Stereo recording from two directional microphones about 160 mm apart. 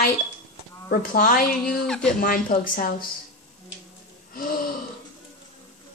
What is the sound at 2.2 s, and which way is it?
Speech, 65° left (ahead or behind).